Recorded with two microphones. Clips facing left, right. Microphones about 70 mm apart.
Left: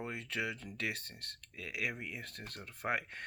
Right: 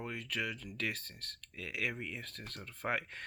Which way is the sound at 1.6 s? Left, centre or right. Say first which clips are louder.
Right 1 dB; centre.